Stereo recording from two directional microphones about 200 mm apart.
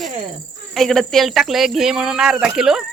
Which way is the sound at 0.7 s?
Centre (ahead or behind).